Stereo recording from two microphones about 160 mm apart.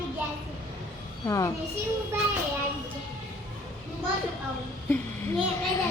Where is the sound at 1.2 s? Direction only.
20° left (ahead or behind).